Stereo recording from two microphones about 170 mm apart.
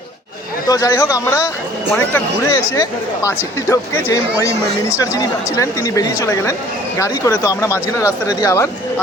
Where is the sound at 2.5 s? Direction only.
20° left (ahead or behind).